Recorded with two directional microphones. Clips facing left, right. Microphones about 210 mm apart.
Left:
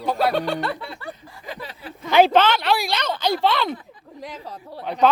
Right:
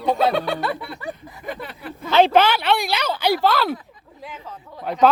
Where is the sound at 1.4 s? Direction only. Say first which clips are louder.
Right 4 dB; 55° right (ahead or behind).